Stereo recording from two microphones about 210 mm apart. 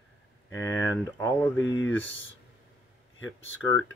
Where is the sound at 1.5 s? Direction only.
65° left (ahead or behind).